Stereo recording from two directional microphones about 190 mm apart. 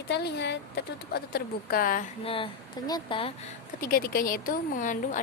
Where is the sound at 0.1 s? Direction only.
60° left (ahead or behind); by 2.0 s 45° left (ahead or behind).